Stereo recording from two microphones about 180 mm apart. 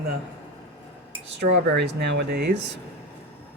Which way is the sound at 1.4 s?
70° right (ahead or behind).